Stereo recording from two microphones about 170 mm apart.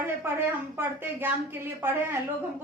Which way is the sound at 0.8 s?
10° right (ahead or behind).